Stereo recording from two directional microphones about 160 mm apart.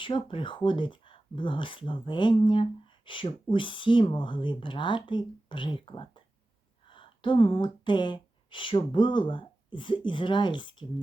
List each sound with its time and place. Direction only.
0.0 s speech: 30° left (ahead or behind)